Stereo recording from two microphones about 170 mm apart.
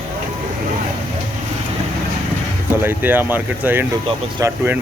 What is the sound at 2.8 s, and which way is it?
Speech, 10° right (ahead or behind).